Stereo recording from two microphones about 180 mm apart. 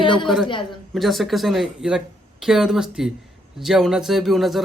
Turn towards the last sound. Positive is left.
turn(degrees=0)  # may be behind; listen again after turning